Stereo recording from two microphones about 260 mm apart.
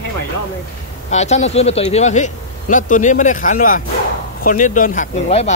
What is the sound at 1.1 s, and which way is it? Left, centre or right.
Speech, left.